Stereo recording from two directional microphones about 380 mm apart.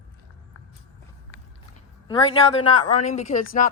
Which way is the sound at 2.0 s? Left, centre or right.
Centre.